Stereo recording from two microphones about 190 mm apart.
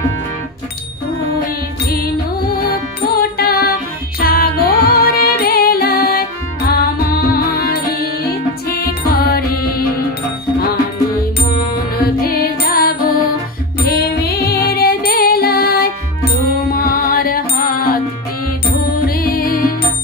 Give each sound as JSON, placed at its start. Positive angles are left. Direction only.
{"t": 3.1, "sound": "music", "side_deg": 55}
{"t": 11.5, "sound": "music", "side_deg": 50}
{"t": 19.0, "sound": "music", "side_deg": 50}